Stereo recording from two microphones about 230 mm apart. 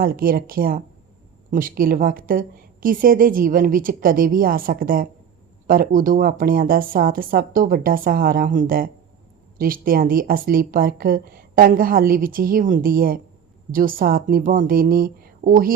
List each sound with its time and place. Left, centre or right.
0.0 s a woman's voice: right